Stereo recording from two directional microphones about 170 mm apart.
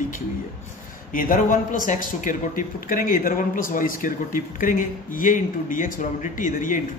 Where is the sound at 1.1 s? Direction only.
55° left (ahead or behind).